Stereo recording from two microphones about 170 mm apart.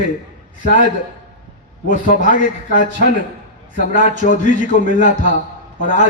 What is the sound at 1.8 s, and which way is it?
A man's voice, 55° left (ahead or behind).